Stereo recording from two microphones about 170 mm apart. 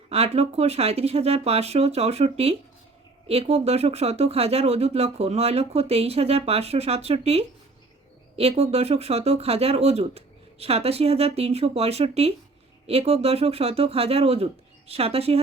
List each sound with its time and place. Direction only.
0.1 s speech: 35° right (ahead or behind)